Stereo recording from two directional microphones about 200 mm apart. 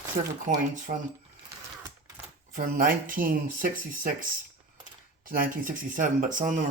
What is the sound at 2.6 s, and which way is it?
Speech, 45° right (ahead or behind).